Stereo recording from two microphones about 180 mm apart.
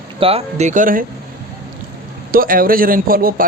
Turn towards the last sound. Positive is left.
turn(degrees=-55)  # may be behind; listen again after turning